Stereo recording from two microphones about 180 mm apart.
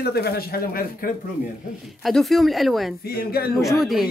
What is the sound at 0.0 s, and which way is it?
Speech, 60° left (ahead or behind).